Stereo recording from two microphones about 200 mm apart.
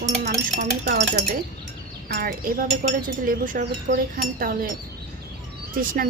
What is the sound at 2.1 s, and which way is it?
A woman's voice, 50° right (ahead or behind).